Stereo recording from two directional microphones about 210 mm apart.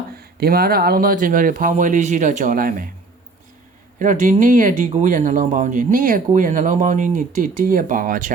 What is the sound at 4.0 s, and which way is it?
Speech, 35° right (ahead or behind).